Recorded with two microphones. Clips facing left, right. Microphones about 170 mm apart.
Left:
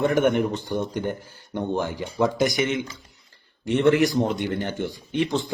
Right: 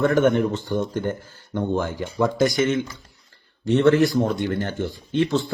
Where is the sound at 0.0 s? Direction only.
15° left (ahead or behind).